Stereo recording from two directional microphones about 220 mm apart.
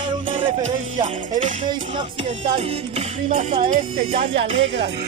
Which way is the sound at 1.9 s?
25° right (ahead or behind).